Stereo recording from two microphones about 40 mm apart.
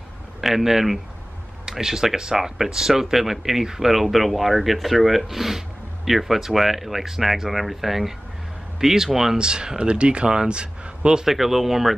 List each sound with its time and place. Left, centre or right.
0.4 s speech: centre
9.4 s speech: right
11.2 s speech: centre